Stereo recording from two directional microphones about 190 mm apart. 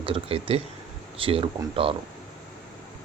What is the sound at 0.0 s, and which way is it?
Speech, 30° right (ahead or behind).